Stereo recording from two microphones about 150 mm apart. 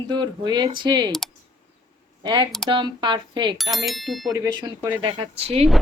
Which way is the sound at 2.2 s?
30° right (ahead or behind).